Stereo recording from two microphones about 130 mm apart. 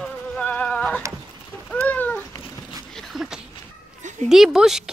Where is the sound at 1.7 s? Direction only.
15° left (ahead or behind).